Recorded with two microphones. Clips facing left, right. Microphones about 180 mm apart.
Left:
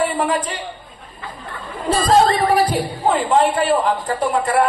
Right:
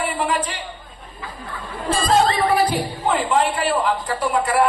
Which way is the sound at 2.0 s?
35° left (ahead or behind).